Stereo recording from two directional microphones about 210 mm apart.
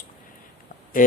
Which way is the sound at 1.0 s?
40° left (ahead or behind).